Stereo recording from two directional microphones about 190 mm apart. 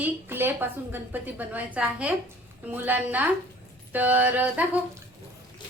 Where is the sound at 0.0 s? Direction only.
10° right (ahead or behind).